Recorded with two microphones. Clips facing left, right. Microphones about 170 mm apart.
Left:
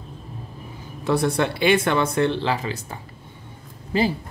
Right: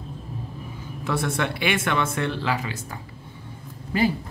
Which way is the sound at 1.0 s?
35° left (ahead or behind).